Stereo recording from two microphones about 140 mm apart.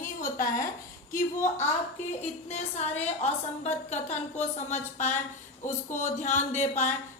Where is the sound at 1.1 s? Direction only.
65° left (ahead or behind).